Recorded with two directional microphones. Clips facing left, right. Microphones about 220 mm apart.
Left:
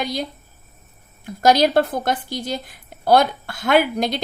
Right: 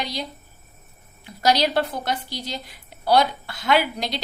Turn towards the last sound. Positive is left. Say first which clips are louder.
# left 4 dB
turn(degrees=50)  # may be behind; listen again after turning